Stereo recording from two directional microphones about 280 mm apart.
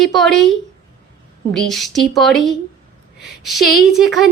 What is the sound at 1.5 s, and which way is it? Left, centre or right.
Speech, centre.